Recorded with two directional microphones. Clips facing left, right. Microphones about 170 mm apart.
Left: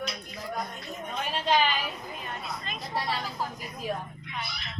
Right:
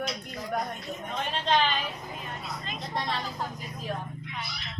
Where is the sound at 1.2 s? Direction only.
5° left (ahead or behind).